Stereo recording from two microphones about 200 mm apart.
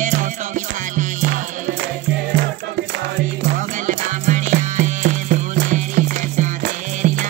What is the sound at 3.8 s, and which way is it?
Music, 40° right (ahead or behind).